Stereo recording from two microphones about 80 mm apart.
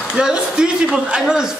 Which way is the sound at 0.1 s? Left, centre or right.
Centre.